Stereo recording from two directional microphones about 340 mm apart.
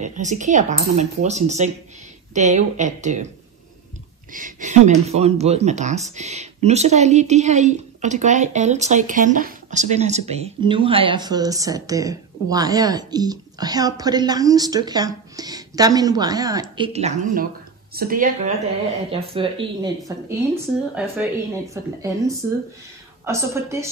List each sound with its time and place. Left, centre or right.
0.0 s speech: right
4.3 s speech: right